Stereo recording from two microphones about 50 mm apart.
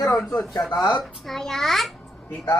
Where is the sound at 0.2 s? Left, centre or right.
Centre.